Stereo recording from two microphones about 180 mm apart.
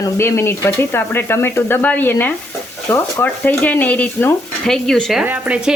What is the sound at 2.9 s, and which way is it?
Speech, 15° left (ahead or behind).